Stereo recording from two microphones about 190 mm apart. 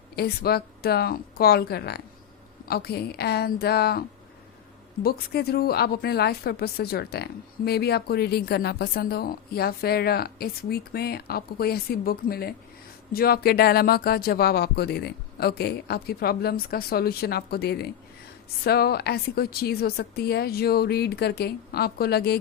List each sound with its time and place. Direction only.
0.2 s speech: 55° left (ahead or behind)
5.0 s speech: 55° left (ahead or behind)